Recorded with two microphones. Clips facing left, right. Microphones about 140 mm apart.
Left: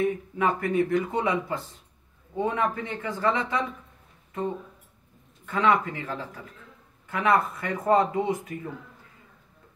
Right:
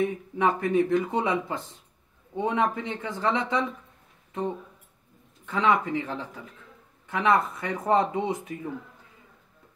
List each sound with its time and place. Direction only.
0.0 s speech: 20° right (ahead or behind)
5.4 s speech: 20° right (ahead or behind)